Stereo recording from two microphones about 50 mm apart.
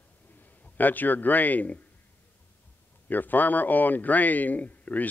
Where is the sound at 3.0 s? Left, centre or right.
Left.